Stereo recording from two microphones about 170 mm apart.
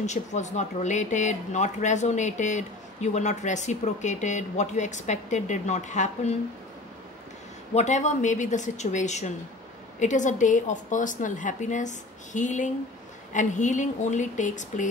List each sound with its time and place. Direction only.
0.0 s speech: 45° left (ahead or behind)
7.7 s speech: 45° left (ahead or behind)